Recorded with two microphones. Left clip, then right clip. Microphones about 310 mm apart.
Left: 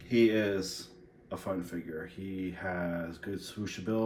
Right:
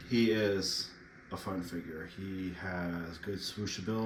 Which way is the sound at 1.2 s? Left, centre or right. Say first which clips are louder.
Left 3 dB; centre.